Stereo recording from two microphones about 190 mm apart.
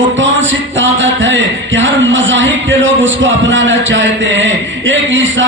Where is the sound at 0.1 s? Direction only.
85° right.